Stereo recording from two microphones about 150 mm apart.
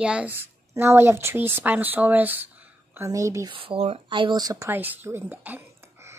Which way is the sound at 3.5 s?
35° right (ahead or behind).